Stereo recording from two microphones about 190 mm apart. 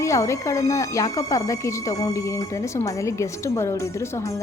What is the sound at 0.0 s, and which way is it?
Speech, 15° left (ahead or behind).